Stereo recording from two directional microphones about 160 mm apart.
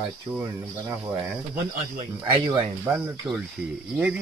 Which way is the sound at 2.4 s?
30° right (ahead or behind).